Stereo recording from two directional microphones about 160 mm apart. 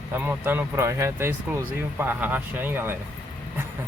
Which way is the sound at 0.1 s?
10° right (ahead or behind).